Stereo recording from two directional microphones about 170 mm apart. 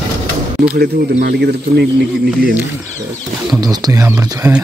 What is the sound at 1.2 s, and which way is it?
Speech, 75° right (ahead or behind).